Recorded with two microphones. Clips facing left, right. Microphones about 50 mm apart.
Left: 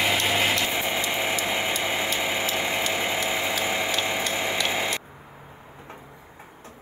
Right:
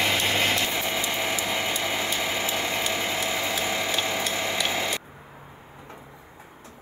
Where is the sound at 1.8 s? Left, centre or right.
Centre.